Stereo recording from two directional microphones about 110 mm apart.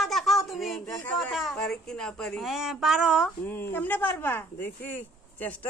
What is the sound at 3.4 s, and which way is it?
Speech, 20° left (ahead or behind).